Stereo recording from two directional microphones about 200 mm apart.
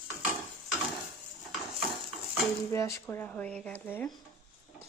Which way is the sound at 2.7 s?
15° left (ahead or behind).